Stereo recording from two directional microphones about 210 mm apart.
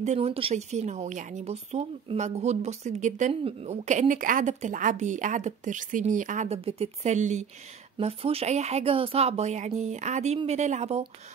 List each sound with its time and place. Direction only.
0.0 s speech: 30° right (ahead or behind)